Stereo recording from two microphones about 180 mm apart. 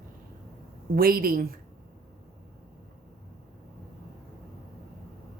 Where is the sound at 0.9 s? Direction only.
55° right (ahead or behind).